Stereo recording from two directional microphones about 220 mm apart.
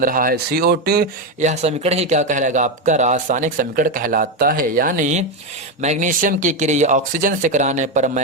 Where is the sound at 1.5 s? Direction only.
30° right (ahead or behind).